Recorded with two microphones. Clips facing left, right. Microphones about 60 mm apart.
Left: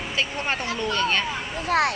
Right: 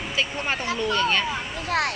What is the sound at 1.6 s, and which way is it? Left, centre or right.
Speech, left.